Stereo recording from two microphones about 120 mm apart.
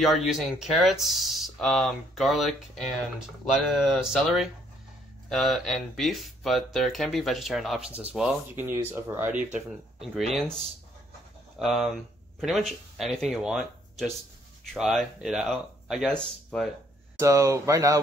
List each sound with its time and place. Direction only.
0.0 s speech: centre (ahead or behind)
10.1 s speech: centre (ahead or behind)
11.6 s speech: centre (ahead or behind)
17.2 s speech: 25° right (ahead or behind)